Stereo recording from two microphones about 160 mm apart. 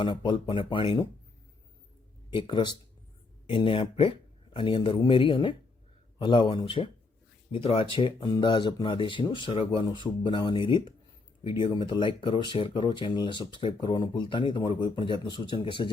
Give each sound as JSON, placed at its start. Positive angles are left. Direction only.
{"t": 0.0, "sound": "speech", "side_deg": 30}
{"t": 2.3, "sound": "speech", "side_deg": 30}